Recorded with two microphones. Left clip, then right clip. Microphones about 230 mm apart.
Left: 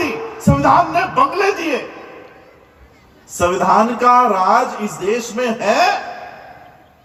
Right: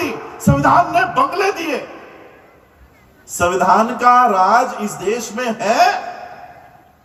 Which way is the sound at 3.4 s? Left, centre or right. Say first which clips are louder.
Even; right.